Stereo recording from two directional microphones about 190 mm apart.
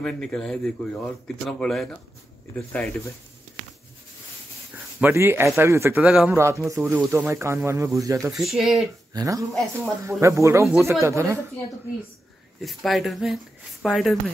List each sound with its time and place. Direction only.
0.0 s speech: 5° left (ahead or behind)
5.0 s speech: 10° right (ahead or behind)
6.3 s speech: 15° right (ahead or behind)
8.4 s speech: centre (ahead or behind)
9.1 s speech: 15° right (ahead or behind)
12.6 s speech: centre (ahead or behind)